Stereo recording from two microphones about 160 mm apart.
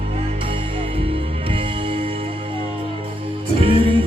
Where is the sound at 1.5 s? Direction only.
35° right (ahead or behind).